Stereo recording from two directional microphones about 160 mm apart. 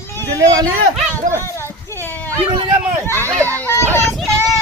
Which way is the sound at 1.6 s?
15° left (ahead or behind).